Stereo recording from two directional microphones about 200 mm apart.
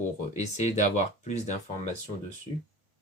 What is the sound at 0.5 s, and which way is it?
Speech, 35° left (ahead or behind).